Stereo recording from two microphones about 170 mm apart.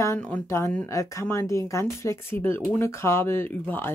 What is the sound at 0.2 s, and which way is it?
Speech, 10° left (ahead or behind).